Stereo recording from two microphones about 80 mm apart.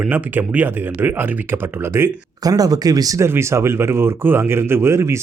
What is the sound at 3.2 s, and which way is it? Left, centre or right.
Speech, right.